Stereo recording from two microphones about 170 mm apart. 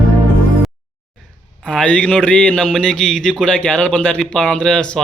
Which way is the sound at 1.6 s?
5° left (ahead or behind).